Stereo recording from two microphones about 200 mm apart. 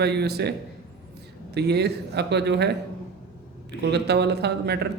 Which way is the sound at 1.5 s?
55° right (ahead or behind).